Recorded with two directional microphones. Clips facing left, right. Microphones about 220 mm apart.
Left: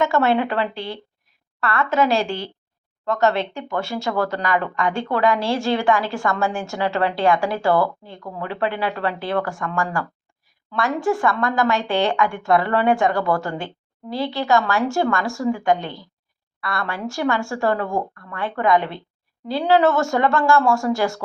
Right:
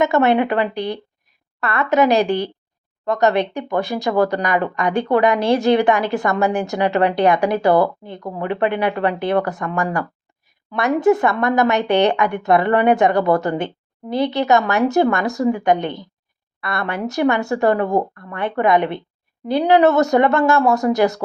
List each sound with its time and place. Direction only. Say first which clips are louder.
0.0 s a woman's voice: right 3 dB; 20° right (ahead or behind)